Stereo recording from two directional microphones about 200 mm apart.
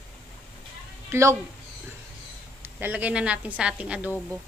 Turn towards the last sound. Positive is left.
turn(degrees=-10)  # may be behind; listen again after turning